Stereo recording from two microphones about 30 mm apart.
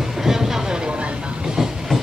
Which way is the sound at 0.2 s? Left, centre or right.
Centre.